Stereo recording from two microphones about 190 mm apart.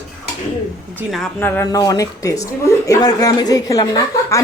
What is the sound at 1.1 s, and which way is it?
A woman's voice, 5° left (ahead or behind).